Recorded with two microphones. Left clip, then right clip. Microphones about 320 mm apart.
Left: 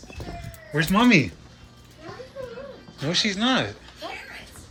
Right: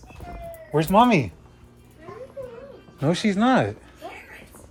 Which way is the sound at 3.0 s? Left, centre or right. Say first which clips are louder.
Right 1 dB; centre.